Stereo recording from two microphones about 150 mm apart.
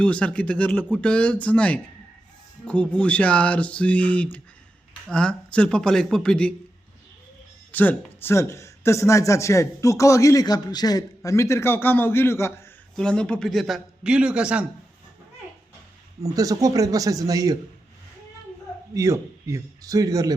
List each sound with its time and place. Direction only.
0.0 s speech: 10° left (ahead or behind)
2.9 s speech: 10° left (ahead or behind)
7.7 s a man's voice: 10° left (ahead or behind)
13.0 s speech: 5° left (ahead or behind)
16.2 s a man's voice: 25° right (ahead or behind)
18.9 s a man's voice: 20° right (ahead or behind)